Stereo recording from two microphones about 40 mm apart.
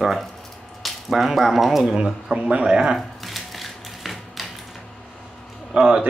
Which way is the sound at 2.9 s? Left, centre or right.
Centre.